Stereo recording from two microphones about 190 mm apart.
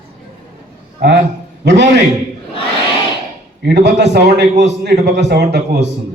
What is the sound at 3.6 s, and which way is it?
A man's voice, 60° right (ahead or behind).